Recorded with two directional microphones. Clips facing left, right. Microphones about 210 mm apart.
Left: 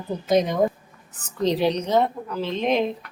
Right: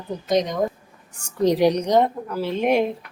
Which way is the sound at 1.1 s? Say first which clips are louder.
Right 4 dB; 10° right (ahead or behind).